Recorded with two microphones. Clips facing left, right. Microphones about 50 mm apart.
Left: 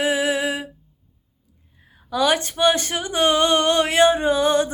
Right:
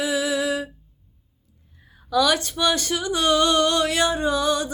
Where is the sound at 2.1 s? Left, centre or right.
Left.